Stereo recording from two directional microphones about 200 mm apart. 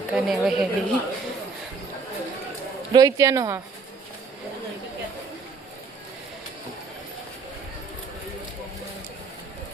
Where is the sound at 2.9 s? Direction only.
20° right (ahead or behind).